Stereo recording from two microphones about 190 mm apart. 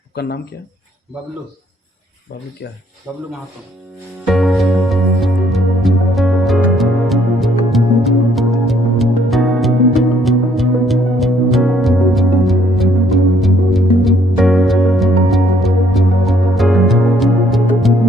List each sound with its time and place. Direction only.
0.1 s speech: 55° left (ahead or behind)
3.1 s speech: 5° right (ahead or behind)
4.3 s music: centre (ahead or behind)